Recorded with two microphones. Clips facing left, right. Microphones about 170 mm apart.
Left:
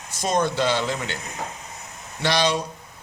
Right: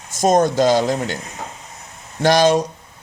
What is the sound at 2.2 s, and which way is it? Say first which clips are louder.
Speech: right 8 dB; 45° right (ahead or behind).